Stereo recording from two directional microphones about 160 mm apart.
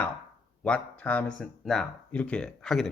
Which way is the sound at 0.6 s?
10° left (ahead or behind).